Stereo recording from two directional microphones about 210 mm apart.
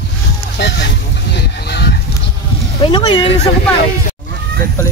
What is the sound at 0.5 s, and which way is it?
Speech, 55° left (ahead or behind).